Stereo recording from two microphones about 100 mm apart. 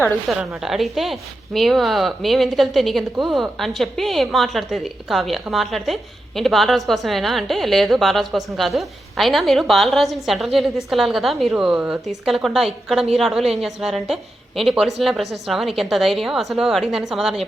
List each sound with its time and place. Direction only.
0.3 s speech: centre (ahead or behind)